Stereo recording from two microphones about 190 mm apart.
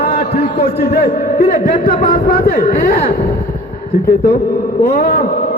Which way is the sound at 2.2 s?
55° left (ahead or behind).